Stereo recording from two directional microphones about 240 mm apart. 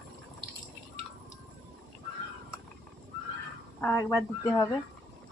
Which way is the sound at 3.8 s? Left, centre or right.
Centre.